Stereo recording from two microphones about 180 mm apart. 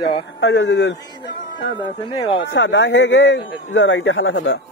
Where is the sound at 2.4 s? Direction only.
85° left.